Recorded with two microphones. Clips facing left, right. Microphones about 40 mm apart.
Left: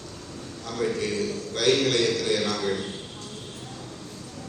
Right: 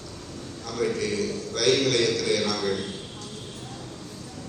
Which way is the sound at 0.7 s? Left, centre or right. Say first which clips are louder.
Right 1 dB; left.